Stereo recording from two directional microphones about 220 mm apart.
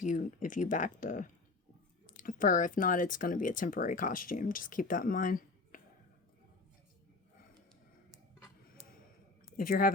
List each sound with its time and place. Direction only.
0.0 s speech: 35° left (ahead or behind)
9.6 s speech: 40° left (ahead or behind)